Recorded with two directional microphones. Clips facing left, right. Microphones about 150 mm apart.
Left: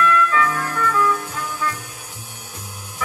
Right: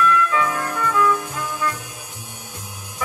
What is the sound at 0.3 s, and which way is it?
Music, 20° right (ahead or behind).